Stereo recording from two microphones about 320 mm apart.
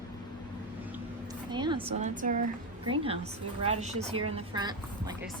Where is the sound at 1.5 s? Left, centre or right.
Centre.